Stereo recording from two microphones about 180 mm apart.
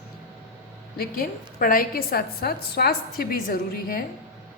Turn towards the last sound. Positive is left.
turn(degrees=55)  # may be behind; listen again after turning